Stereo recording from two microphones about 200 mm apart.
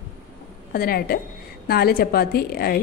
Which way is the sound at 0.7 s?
50° left (ahead or behind).